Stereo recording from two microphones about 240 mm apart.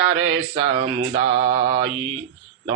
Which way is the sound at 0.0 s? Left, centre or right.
Right.